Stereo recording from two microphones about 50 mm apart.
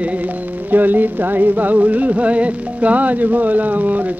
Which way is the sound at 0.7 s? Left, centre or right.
Right.